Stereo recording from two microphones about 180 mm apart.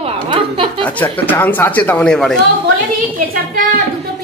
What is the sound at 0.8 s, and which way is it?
Speech, 10° left (ahead or behind).